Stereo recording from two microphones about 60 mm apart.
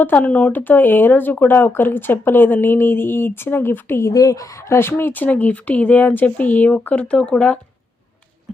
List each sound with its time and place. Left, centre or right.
0.0 s speech: left
0.5 s speech: left
4.0 s speech: left; by 7.6 s centre